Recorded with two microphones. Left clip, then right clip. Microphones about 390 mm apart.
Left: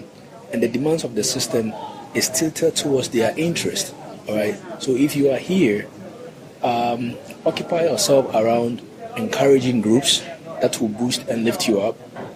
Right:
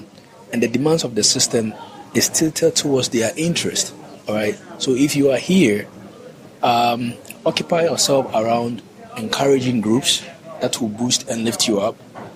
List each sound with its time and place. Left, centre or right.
0.5 s a man's voice: right